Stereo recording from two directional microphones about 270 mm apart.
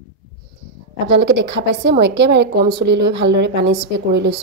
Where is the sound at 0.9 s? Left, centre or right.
Right.